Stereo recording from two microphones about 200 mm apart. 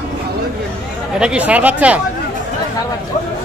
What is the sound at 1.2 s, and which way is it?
Speech, 5° right (ahead or behind).